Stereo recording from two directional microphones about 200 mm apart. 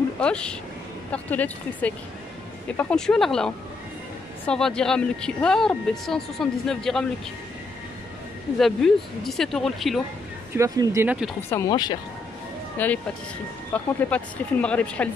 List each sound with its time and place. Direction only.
0.2 s speech: 5° left (ahead or behind)
8.5 s speech: centre (ahead or behind)
10.5 s speech: 15° right (ahead or behind)
11.5 s speech: 20° left (ahead or behind)
12.7 s speech: 10° left (ahead or behind)